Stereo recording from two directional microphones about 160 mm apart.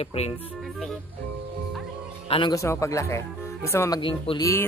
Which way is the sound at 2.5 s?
20° left (ahead or behind).